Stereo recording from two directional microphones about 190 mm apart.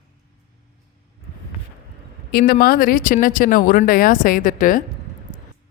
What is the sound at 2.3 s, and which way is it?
Speech, 50° left (ahead or behind).